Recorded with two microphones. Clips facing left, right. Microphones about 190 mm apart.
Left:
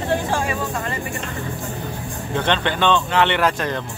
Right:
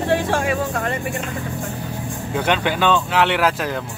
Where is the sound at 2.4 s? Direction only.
10° right (ahead or behind).